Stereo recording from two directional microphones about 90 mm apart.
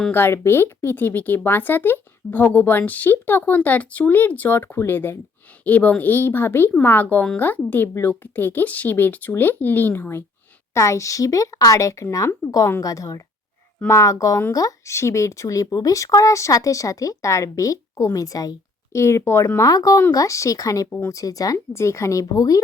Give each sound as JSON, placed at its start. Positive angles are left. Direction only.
{"t": 0.1, "sound": "a woman's voice", "side_deg": 25}
{"t": 18.9, "sound": "speech", "side_deg": 30}
{"t": 20.9, "sound": "speech", "side_deg": 25}
{"t": 21.2, "sound": "speech", "side_deg": 40}
{"t": 21.7, "sound": "speech", "side_deg": 30}